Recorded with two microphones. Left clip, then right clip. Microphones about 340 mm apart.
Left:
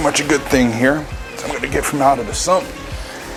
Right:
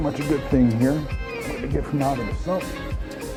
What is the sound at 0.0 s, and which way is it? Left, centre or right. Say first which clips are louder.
Speech: left 9 dB; centre.